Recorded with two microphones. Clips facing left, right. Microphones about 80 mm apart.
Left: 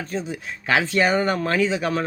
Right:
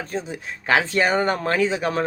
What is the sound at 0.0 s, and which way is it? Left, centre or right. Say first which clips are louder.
Speech: even; right.